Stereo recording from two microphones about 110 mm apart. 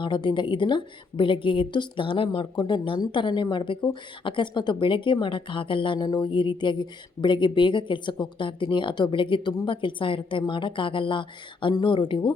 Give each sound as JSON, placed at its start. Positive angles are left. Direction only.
{"t": 0.0, "sound": "speech", "side_deg": 45}